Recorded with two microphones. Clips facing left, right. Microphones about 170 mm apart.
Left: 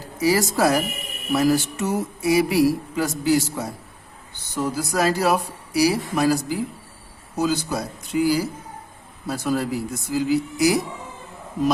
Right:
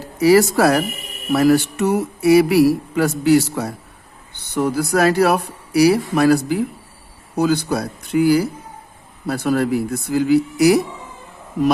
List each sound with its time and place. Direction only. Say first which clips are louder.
0.0 s speech: right 8 dB; 65° right (ahead or behind)